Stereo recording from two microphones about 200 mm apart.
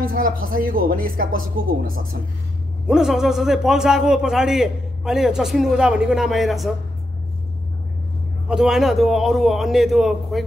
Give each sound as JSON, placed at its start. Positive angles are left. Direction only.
{"t": 0.0, "sound": "speech", "side_deg": -45}
{"t": 2.9, "sound": "a man's voice", "side_deg": 0}
{"t": 8.5, "sound": "a man's voice", "side_deg": 0}